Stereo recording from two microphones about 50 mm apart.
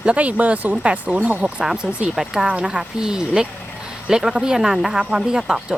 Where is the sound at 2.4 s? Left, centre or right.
Right.